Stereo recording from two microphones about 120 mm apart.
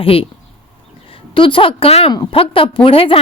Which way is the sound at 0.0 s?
50° left (ahead or behind).